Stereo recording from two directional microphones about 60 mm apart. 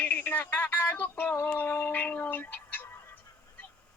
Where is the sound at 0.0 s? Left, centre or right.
Left.